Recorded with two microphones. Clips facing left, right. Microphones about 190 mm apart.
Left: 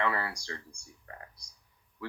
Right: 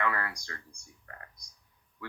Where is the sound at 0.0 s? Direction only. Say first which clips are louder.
Left 1 dB; 30° left (ahead or behind).